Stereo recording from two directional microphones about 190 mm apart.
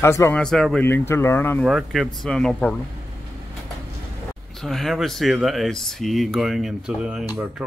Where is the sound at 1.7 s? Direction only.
Centre (ahead or behind).